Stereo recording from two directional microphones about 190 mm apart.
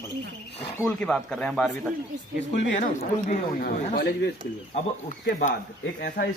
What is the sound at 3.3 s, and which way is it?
Speech, 50° left (ahead or behind).